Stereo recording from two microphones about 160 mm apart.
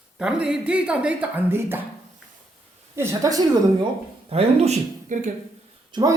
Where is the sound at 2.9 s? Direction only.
15° right (ahead or behind).